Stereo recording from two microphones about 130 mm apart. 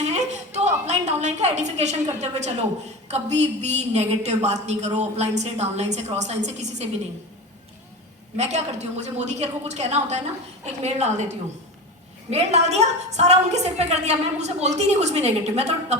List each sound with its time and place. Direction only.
0.0 s a woman's voice: 60° right (ahead or behind)
8.4 s a woman's voice: 60° right (ahead or behind)